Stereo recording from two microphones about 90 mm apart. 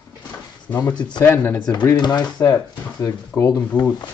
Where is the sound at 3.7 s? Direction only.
20° right (ahead or behind).